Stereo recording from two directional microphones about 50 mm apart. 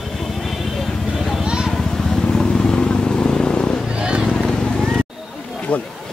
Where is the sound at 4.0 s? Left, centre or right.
Centre.